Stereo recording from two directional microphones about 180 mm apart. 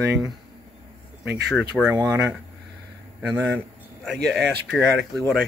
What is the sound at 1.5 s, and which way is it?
Speech, centre (ahead or behind).